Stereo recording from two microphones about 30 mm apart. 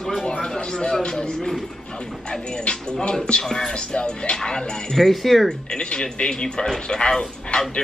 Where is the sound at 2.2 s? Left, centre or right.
Left.